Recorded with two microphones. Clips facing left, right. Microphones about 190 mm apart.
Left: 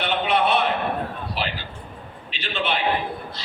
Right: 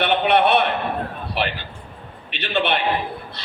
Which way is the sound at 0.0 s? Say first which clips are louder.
Right 4 dB; 65° right (ahead or behind).